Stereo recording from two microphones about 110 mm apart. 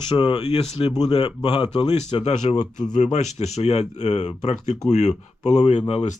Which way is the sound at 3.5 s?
75° left (ahead or behind).